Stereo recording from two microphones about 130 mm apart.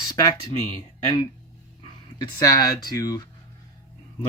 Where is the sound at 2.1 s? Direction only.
30° left (ahead or behind).